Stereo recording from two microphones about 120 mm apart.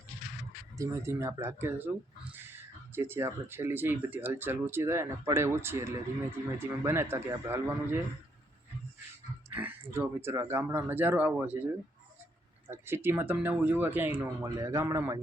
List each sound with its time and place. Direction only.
0.8 s speech: 20° right (ahead or behind)
9.5 s a sound: 15° right (ahead or behind)
9.9 s speech: 20° right (ahead or behind)
12.7 s speech: 20° right (ahead or behind)